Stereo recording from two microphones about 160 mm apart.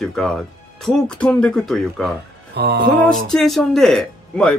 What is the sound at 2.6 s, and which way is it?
Speech, 80° right.